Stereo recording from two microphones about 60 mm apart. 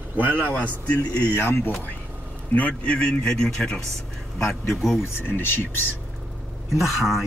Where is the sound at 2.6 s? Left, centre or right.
Left.